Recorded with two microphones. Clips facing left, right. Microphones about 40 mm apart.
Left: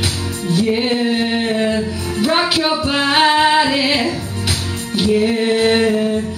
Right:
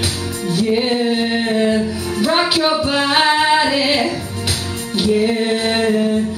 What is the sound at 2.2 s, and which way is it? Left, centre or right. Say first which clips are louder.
Music: even; centre.